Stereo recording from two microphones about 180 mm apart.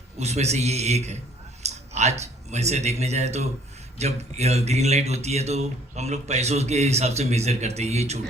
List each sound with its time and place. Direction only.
0.2 s speech: 35° right (ahead or behind)